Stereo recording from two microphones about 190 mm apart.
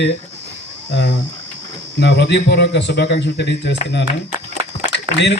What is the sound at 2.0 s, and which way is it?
A man's voice, 60° left (ahead or behind).